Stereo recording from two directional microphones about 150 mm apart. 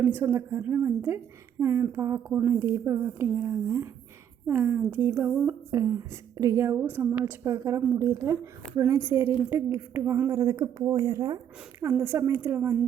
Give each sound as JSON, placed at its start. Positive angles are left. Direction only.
{"t": 0.0, "sound": "a woman's voice", "side_deg": -15}
{"t": 5.7, "sound": "a woman's voice", "side_deg": -20}